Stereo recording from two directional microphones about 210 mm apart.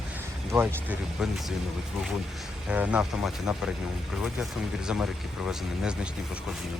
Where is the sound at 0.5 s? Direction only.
10° right (ahead or behind).